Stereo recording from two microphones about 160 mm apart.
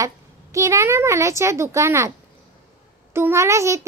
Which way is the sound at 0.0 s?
20° right (ahead or behind).